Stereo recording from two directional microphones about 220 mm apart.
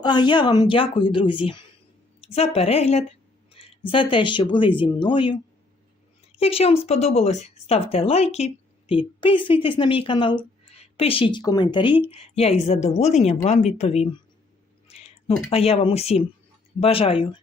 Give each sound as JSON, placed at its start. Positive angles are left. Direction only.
{"t": 0.0, "sound": "a woman's voice", "side_deg": 20}